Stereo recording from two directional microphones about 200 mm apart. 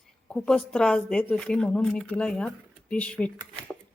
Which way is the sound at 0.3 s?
5° left (ahead or behind).